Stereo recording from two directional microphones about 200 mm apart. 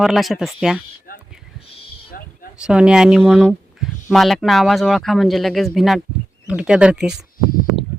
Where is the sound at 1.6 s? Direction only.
30° left (ahead or behind).